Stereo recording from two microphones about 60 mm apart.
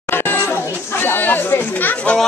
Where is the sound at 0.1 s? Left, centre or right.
Left.